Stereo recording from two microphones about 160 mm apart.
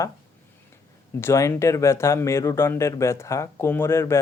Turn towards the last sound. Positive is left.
turn(degrees=15)  # may be behind; listen again after turning